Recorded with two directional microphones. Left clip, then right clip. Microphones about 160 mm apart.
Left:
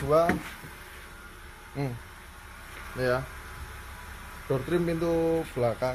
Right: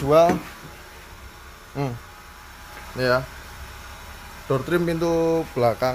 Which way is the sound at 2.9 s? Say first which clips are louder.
Right 7 dB; 10° right (ahead or behind).